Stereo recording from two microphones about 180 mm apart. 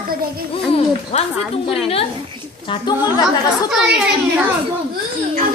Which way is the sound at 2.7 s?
25° left (ahead or behind).